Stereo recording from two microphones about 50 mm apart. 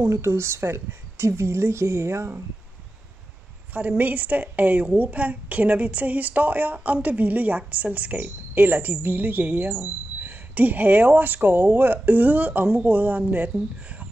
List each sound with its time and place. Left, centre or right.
0.0 s speech: right
3.7 s a woman's voice: right